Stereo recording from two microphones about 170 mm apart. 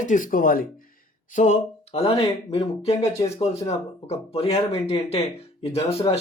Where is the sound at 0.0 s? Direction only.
50° left (ahead or behind).